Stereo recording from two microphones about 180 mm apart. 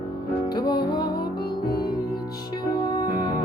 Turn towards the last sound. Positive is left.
turn(degrees=20)  # may be behind; listen again after turning